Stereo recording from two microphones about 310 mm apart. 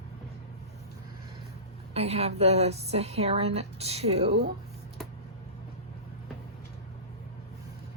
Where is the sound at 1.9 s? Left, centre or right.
Centre.